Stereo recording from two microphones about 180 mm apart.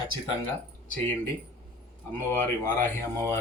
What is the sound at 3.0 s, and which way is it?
Speech, 15° left (ahead or behind).